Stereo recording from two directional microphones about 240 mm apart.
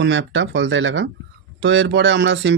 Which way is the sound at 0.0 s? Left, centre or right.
Right.